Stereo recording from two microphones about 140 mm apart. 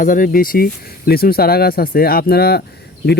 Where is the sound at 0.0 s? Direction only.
80° left.